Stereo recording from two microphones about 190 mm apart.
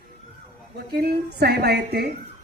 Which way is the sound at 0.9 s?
60° right (ahead or behind).